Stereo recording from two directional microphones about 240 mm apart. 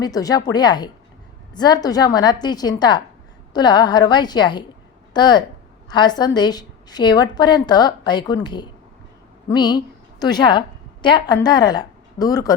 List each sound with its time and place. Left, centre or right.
0.0 s a woman's voice: centre